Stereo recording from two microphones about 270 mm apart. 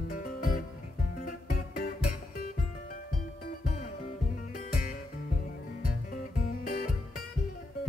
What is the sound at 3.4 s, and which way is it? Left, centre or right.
Music, left.